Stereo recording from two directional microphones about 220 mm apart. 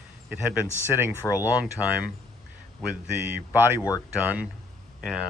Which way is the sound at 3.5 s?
10° right (ahead or behind).